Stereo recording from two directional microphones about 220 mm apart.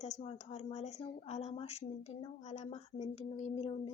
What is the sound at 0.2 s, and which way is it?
Speech, 30° left (ahead or behind).